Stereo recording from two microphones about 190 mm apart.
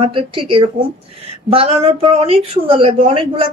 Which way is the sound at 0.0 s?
25° right (ahead or behind).